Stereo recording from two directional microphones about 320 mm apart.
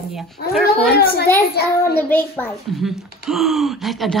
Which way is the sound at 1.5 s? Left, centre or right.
Left.